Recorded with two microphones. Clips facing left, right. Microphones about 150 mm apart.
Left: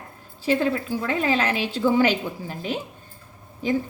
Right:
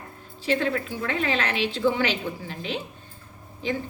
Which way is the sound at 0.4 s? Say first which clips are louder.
Left 3 dB; 40° left (ahead or behind).